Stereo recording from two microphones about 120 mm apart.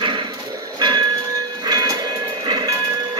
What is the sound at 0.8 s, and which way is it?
Church bell, 40° right (ahead or behind).